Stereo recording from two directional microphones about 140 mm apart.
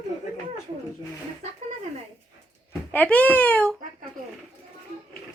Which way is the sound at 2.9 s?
10° left (ahead or behind).